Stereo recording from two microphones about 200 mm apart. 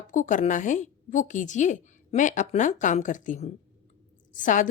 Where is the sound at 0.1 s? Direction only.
40° left (ahead or behind).